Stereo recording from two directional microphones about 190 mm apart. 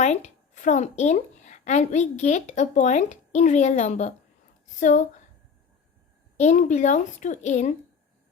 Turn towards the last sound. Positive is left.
turn(degrees=35)  # may be behind; listen again after turning